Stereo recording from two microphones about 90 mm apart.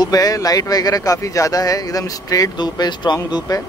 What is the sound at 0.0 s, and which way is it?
Speech, 45° left (ahead or behind).